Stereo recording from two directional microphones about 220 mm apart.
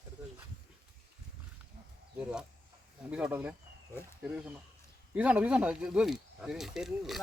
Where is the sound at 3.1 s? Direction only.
5° right (ahead or behind).